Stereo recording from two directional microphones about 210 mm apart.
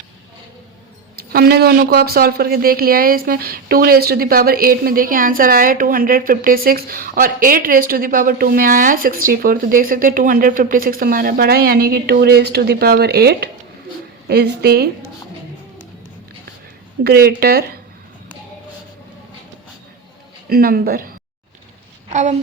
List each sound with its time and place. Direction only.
1.3 s speech: 50° right (ahead or behind)
17.0 s speech: 45° right (ahead or behind)
20.5 s speech: 45° right (ahead or behind)
22.1 s a woman's voice: 35° right (ahead or behind)